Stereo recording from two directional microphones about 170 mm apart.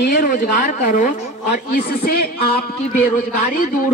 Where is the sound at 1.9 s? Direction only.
65° left (ahead or behind).